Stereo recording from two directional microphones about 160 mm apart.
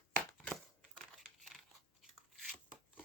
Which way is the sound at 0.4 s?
5° left (ahead or behind).